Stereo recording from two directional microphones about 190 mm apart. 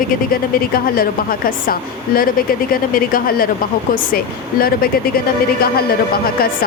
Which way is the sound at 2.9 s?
50° left (ahead or behind).